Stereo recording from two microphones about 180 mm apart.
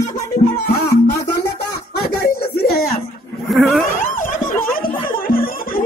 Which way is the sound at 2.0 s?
60° left (ahead or behind).